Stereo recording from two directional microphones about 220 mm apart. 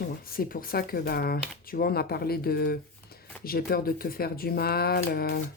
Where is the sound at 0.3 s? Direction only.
40° left (ahead or behind).